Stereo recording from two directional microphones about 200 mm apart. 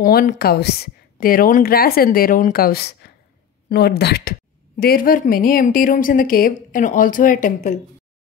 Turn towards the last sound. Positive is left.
turn(degrees=40)  # may be behind; listen again after turning